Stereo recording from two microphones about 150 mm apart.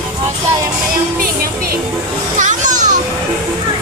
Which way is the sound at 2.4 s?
55° right (ahead or behind).